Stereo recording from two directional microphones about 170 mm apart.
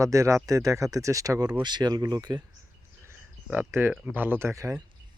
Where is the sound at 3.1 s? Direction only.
10° right (ahead or behind).